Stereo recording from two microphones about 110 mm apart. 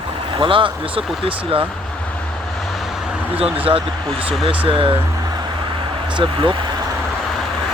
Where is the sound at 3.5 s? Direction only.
55° right (ahead or behind).